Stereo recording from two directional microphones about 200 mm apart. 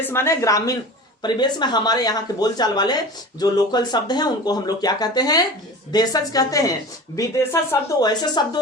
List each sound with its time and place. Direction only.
0.0 s a woman's voice: 10° left (ahead or behind)